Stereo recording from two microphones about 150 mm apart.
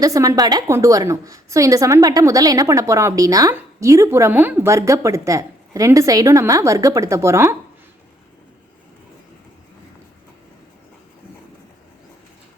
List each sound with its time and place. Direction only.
0.0 s a woman's voice: 20° right (ahead or behind)